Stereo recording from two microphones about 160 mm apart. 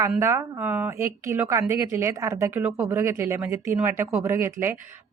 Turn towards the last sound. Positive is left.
turn(degrees=-15)  # may be behind; listen again after turning